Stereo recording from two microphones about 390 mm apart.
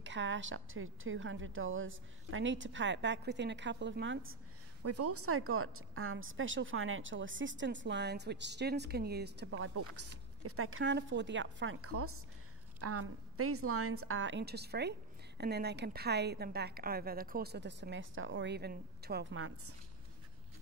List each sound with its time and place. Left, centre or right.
0.0 s a woman's voice: right